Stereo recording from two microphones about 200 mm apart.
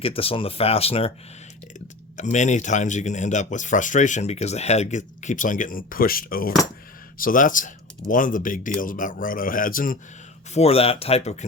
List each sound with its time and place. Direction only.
0.0 s speech: 30° left (ahead or behind)
2.1 s speech: 35° left (ahead or behind)
10.5 s speech: 30° left (ahead or behind)